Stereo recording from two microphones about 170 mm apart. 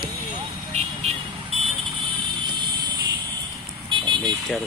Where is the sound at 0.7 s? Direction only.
40° right (ahead or behind).